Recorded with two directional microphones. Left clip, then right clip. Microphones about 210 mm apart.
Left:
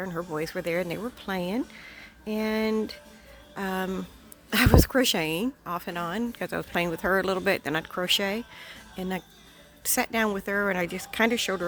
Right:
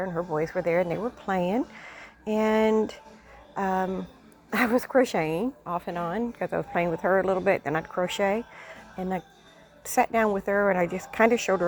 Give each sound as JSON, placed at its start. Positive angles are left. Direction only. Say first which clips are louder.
{"t": 0.0, "sound": "a woman's voice", "louder": "right 4 dB", "side_deg": 40}
{"t": 3.5, "sound": "a woman's voice", "louder": "right 4 dB", "side_deg": 35}